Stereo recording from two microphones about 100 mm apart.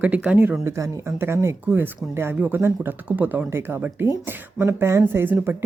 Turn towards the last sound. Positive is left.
turn(degrees=-20)  # may be behind; listen again after turning